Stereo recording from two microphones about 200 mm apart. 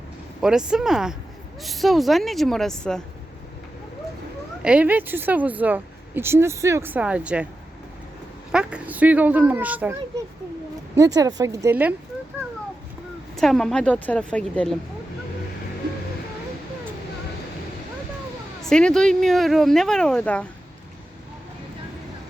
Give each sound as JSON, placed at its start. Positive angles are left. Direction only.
{"t": 0.4, "sound": "speech", "side_deg": -5}
{"t": 4.6, "sound": "speech", "side_deg": -5}
{"t": 8.5, "sound": "speech", "side_deg": -5}
{"t": 10.9, "sound": "speech", "side_deg": -15}
{"t": 13.3, "sound": "speech", "side_deg": 0}
{"t": 18.6, "sound": "speech", "side_deg": 5}